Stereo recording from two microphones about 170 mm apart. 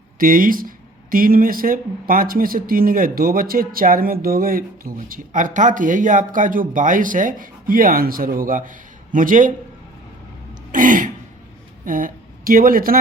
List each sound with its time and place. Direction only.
0.2 s speech: 55° right (ahead or behind)
10.7 s throat clearing: 50° right (ahead or behind)
11.9 s speech: 55° right (ahead or behind)